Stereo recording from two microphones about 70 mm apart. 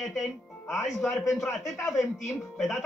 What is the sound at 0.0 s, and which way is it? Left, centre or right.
Speech, centre.